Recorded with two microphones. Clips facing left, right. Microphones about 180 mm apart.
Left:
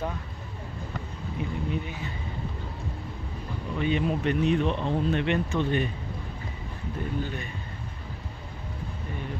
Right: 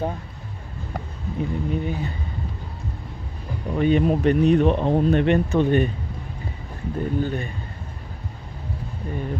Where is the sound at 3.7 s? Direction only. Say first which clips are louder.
Right 8 dB; 45° right (ahead or behind).